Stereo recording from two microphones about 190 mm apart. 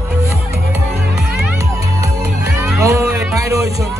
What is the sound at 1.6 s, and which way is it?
Music, 15° right (ahead or behind).